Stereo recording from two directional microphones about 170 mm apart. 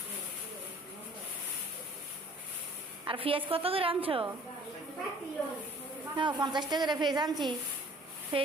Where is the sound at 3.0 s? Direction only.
30° right (ahead or behind).